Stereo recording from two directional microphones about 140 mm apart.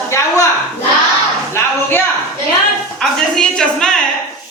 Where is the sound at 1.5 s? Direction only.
15° left (ahead or behind).